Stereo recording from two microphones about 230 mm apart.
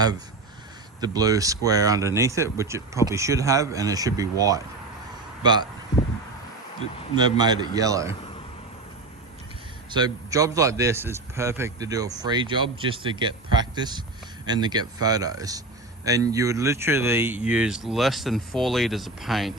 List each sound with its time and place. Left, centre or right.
1.0 s a man's voice: centre
5.9 s a sound: centre
7.2 s a man's voice: centre
9.9 s a man's voice: centre